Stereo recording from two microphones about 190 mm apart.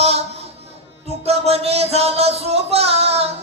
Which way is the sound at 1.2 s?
35° right (ahead or behind).